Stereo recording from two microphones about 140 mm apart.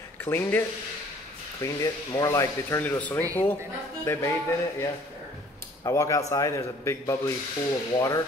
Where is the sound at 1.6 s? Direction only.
25° left (ahead or behind).